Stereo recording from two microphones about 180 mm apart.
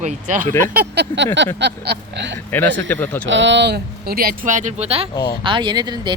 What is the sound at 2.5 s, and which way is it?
Speech, 10° left (ahead or behind).